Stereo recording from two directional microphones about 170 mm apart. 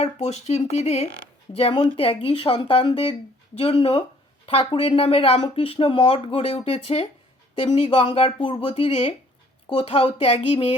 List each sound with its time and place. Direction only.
0.0 s speech: 40° left (ahead or behind)